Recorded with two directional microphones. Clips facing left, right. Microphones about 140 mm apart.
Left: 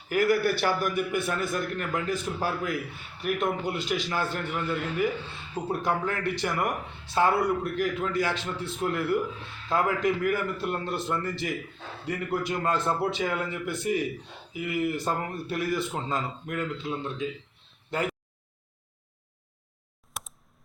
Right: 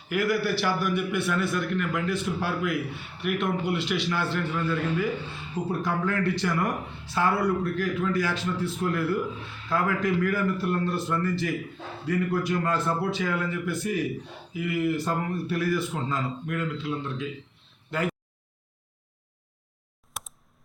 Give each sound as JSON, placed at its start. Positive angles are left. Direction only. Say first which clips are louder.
{"t": 0.1, "sound": "a man's voice", "louder": "left 2 dB", "side_deg": 45}
{"t": 4.4, "sound": "speech", "louder": "right 3 dB", "side_deg": 20}
{"t": 20.1, "sound": "computer keyboard", "louder": "even", "side_deg": 0}